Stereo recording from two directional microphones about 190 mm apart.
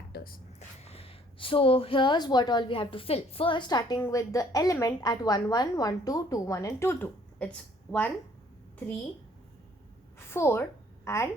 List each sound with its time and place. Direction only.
0.1 s whispering: 50° left (ahead or behind)
0.8 s a woman's voice: 30° left (ahead or behind); by 8.1 s 5° left (ahead or behind)
10.2 s a sound: 15° left (ahead or behind)